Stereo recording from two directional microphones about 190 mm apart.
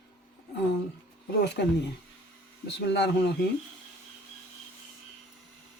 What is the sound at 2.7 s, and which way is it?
Speech, 60° left (ahead or behind).